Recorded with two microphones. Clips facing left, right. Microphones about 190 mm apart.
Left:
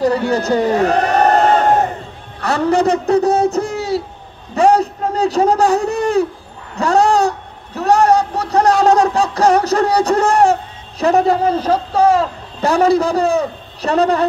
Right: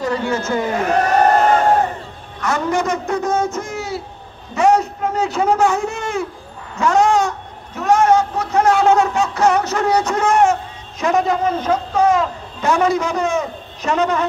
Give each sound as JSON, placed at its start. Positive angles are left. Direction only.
{"t": 0.0, "sound": "speech", "side_deg": 35}
{"t": 2.4, "sound": "a man's voice", "side_deg": 35}
{"t": 4.6, "sound": "a sound", "side_deg": 35}